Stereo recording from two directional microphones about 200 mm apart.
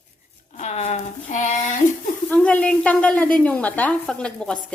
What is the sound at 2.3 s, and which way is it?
A woman's voice, 5° left (ahead or behind).